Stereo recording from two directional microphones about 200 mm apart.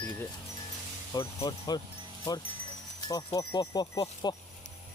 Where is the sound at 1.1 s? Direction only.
20° left (ahead or behind).